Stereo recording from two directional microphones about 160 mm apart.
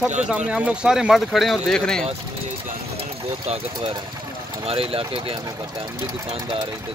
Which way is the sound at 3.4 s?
35° right (ahead or behind).